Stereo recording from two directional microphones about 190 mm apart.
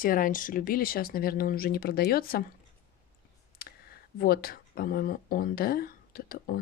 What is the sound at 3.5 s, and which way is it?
Speech, 50° left (ahead or behind).